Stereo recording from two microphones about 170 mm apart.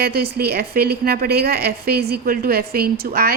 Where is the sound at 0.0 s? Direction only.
65° right (ahead or behind).